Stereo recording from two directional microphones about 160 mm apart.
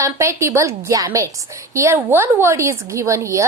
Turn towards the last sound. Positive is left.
turn(degrees=-20)  # may be behind; listen again after turning